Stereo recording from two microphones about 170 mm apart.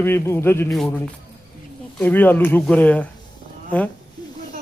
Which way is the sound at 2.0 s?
10° left (ahead or behind).